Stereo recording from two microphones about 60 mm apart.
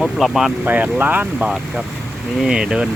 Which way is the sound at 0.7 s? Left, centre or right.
Right.